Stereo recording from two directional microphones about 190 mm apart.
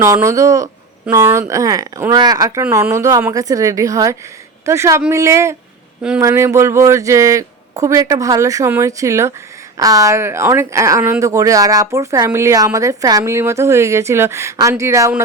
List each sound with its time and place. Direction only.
0.0 s speech: 15° right (ahead or behind)